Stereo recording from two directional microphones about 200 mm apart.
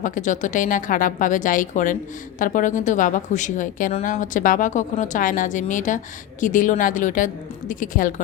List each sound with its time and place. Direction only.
0.0 s a woman's voice: 40° left (ahead or behind)